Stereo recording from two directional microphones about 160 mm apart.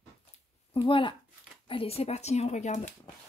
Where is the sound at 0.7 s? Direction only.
30° left (ahead or behind).